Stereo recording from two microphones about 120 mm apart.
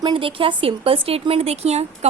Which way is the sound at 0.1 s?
50° right (ahead or behind).